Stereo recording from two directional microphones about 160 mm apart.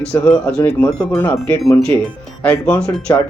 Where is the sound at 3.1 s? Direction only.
20° left (ahead or behind).